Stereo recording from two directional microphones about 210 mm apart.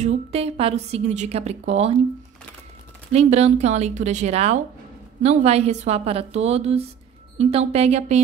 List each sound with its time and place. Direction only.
0.0 s a woman's voice: 30° right (ahead or behind)
3.1 s a woman's voice: 30° right (ahead or behind)